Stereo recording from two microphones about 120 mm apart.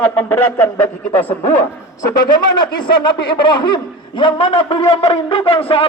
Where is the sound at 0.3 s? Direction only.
20° left (ahead or behind).